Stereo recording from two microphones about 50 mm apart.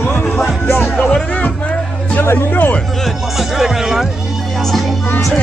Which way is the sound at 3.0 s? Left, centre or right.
Centre.